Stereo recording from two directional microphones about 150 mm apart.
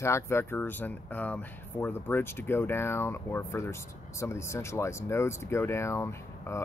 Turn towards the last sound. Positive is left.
turn(degrees=20)  # may be behind; listen again after turning